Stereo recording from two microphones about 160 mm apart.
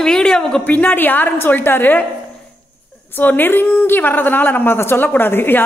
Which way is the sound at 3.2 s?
15° left (ahead or behind).